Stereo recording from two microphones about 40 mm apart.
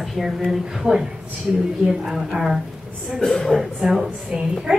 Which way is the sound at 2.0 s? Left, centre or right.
Centre.